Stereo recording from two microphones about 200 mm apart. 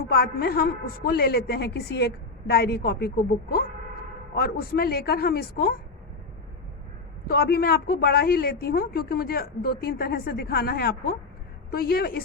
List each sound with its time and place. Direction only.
0.0 s a woman's voice: 50° left (ahead or behind)
7.3 s a woman's voice: 50° left (ahead or behind)